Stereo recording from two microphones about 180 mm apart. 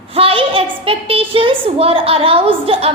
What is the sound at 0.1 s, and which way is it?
A woman's voice, 30° right (ahead or behind).